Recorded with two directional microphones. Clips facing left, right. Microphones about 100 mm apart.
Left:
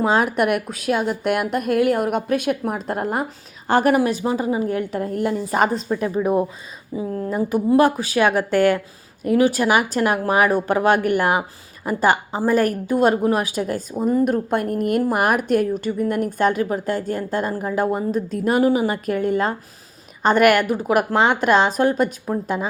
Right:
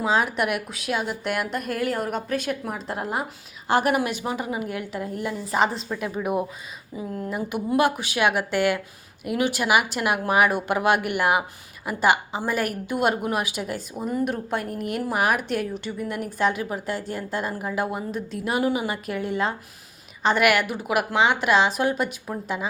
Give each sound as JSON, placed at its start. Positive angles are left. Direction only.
{"t": 0.0, "sound": "a woman's voice", "side_deg": 50}
{"t": 6.9, "sound": "a woman's voice", "side_deg": 35}